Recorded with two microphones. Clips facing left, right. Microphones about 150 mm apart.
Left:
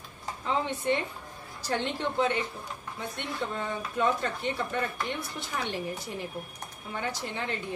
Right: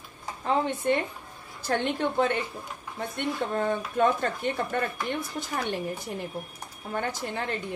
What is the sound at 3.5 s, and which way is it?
Speech, 50° right (ahead or behind).